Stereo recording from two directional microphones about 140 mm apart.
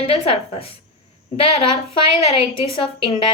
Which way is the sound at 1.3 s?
45° left (ahead or behind).